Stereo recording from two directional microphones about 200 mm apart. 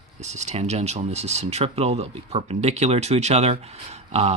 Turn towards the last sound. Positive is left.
turn(degrees=-30)  # may be behind; listen again after turning